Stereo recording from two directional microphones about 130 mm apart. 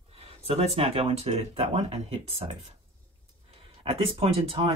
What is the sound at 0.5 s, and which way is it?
Speech, 50° right (ahead or behind).